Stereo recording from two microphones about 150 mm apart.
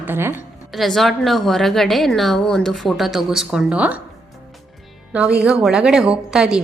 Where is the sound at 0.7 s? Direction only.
Centre (ahead or behind).